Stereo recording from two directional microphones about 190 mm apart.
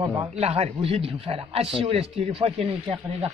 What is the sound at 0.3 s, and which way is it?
Speech, 35° right (ahead or behind).